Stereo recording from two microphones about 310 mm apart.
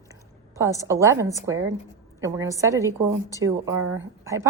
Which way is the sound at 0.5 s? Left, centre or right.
Centre.